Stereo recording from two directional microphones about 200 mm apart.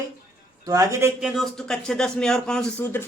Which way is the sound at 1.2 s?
Centre (ahead or behind).